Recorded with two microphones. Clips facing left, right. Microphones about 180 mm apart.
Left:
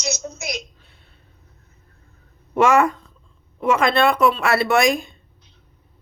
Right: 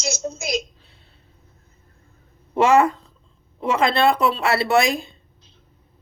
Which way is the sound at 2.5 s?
30° right (ahead or behind).